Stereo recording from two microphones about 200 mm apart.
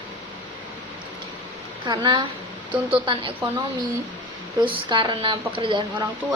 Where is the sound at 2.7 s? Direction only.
5° right (ahead or behind).